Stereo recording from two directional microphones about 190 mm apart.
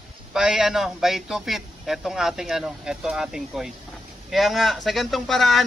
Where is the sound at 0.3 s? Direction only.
5° right (ahead or behind).